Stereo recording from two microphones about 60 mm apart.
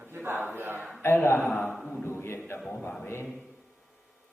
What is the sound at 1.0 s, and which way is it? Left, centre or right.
A man's voice, left.